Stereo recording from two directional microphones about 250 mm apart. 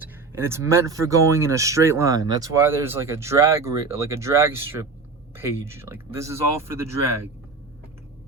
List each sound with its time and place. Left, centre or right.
0.0 s speech: centre